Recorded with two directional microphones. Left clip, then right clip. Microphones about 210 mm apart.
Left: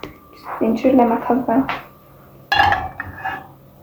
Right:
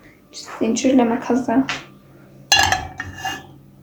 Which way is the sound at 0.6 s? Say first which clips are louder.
Left 2 dB; 20° right (ahead or behind).